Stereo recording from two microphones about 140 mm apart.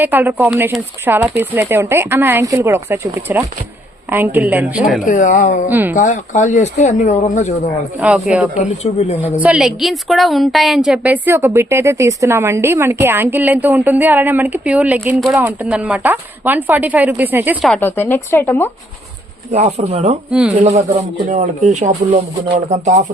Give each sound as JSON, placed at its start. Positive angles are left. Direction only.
{"t": 0.0, "sound": "a woman's voice", "side_deg": -15}
{"t": 5.0, "sound": "speech", "side_deg": 70}
{"t": 5.6, "sound": "a woman's voice", "side_deg": -15}
{"t": 5.9, "sound": "speech", "side_deg": 65}
{"t": 8.0, "sound": "a woman's voice", "side_deg": -10}
{"t": 8.8, "sound": "speech", "side_deg": 50}
{"t": 9.4, "sound": "a woman's voice", "side_deg": -5}
{"t": 17.7, "sound": "speech", "side_deg": 15}
{"t": 19.5, "sound": "speech", "side_deg": -55}